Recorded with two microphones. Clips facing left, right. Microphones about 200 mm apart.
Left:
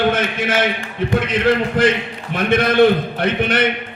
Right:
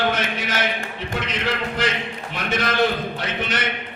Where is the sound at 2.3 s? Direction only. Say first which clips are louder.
Left 9 dB; 55° left (ahead or behind).